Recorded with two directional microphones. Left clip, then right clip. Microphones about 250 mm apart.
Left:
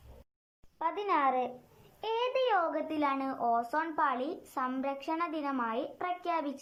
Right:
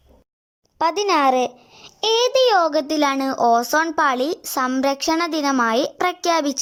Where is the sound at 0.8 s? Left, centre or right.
Right.